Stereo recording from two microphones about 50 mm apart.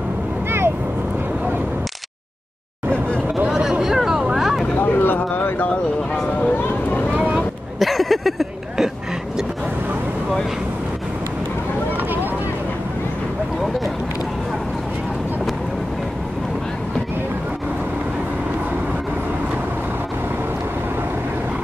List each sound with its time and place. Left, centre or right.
3.4 s vehicle: centre
4.8 s a sound: left
7.3 s vehicle: centre